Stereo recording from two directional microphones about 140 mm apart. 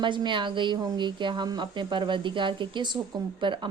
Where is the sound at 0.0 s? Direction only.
35° right (ahead or behind).